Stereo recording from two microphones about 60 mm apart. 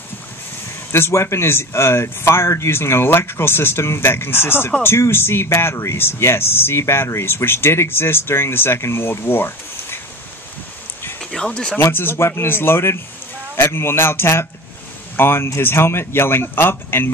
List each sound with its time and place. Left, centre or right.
0.9 s speech: left
11.1 s a sound: centre
11.8 s speech: left